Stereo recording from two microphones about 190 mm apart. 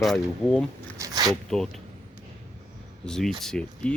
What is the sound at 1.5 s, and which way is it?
Speech, centre (ahead or behind).